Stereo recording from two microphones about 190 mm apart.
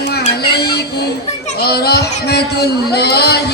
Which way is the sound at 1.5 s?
55° left (ahead or behind).